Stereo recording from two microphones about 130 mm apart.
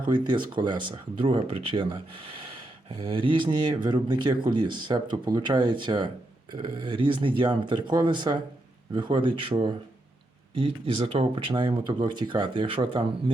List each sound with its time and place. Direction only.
0.0 s speech: 35° right (ahead or behind)